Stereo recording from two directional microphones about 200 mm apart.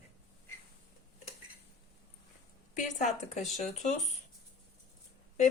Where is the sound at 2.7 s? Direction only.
35° left (ahead or behind).